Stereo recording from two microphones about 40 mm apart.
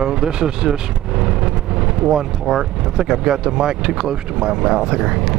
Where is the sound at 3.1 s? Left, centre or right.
Centre.